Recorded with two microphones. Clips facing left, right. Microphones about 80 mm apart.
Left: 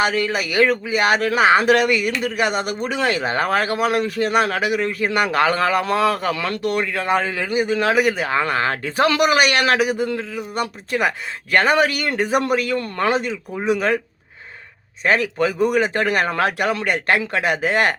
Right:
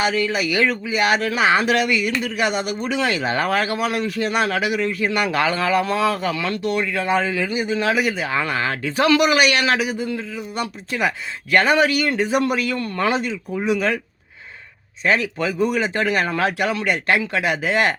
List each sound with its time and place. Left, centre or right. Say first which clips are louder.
0.0 s speech: even; left
15.0 s speech: left 2 dB; left